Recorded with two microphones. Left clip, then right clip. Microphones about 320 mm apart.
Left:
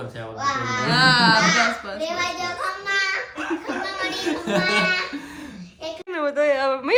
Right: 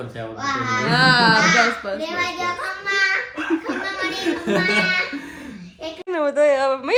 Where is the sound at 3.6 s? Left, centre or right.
Centre.